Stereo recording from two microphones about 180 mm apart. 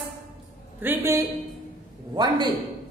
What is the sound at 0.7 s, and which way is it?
Speech, 10° right (ahead or behind).